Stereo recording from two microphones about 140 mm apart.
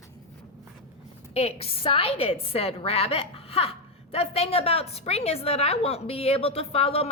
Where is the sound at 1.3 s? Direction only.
45° left (ahead or behind).